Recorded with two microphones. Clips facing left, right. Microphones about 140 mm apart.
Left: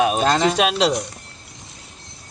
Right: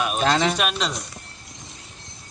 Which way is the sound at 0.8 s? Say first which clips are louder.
Left 9 dB; 20° left (ahead or behind).